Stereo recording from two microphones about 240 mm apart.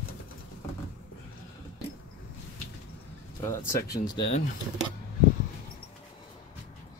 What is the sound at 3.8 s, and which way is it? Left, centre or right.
Speech, centre.